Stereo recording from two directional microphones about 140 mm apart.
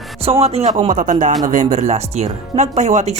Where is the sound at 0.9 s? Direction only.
70° right (ahead or behind).